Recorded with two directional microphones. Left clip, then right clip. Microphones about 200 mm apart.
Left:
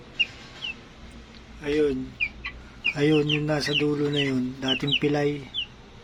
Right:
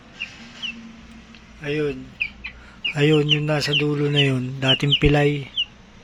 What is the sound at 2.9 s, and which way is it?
Speech, 10° right (ahead or behind).